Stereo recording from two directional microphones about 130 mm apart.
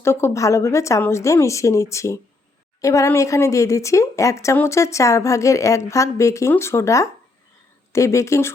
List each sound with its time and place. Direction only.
0.0 s speech: 20° left (ahead or behind)